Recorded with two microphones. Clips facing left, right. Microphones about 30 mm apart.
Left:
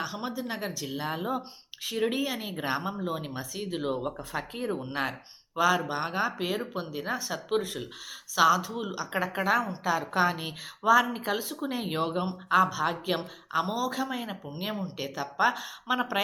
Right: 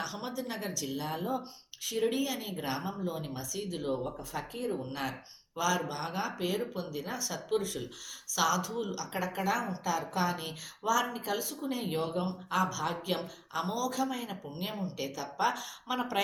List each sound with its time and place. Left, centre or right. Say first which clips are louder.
0.0 s speech: left 3 dB; centre
4.0 s speech: left 4 dB; left